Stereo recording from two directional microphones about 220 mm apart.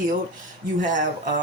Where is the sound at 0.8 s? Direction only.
35° right (ahead or behind).